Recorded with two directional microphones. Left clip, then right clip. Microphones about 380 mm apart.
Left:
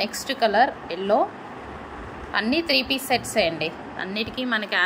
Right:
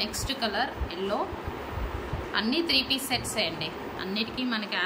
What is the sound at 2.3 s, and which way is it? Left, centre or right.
A woman's voice, centre.